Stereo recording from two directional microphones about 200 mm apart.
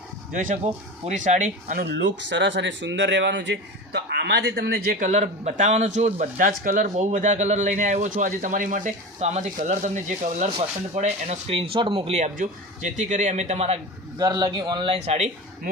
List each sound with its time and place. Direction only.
0.3 s speech: 35° right (ahead or behind)
1.8 s speech: 60° right (ahead or behind); by 13.7 s 35° right (ahead or behind)
14.2 s speech: 20° right (ahead or behind)